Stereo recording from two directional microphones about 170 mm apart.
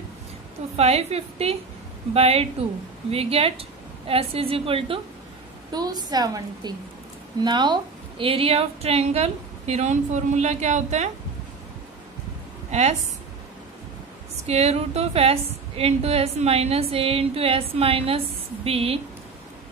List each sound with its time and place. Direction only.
0.7 s a woman's voice: 35° right (ahead or behind)
12.7 s a woman's voice: 40° right (ahead or behind)
14.5 s a woman's voice: 40° right (ahead or behind)